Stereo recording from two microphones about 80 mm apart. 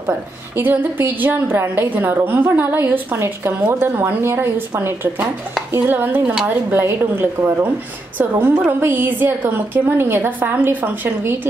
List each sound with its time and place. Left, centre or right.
0.6 s a woman's voice: right